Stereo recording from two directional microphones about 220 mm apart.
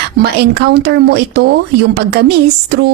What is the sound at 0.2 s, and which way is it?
Speech, 45° right (ahead or behind).